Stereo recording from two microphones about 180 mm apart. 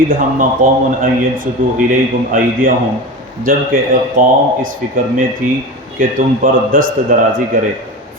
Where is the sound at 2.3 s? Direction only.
50° right (ahead or behind).